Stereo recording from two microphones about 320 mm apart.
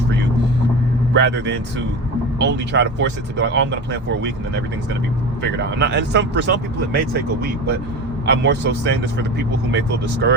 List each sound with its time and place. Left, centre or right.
1.1 s speech: right
5.4 s speech: right
8.3 s speech: right